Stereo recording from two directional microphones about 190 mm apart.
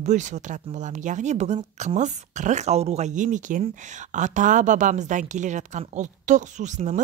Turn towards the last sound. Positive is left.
turn(degrees=-40)  # may be behind; listen again after turning